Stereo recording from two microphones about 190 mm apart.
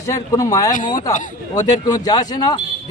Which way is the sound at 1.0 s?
40° left (ahead or behind).